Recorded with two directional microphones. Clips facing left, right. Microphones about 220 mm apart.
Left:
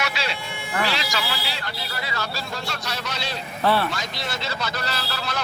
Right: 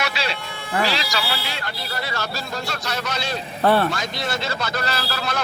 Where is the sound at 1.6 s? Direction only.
45° right (ahead or behind).